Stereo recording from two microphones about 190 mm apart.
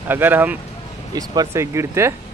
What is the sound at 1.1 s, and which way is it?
Speech, 20° right (ahead or behind).